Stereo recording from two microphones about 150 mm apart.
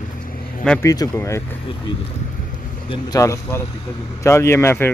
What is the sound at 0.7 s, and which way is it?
Speech, 25° left (ahead or behind).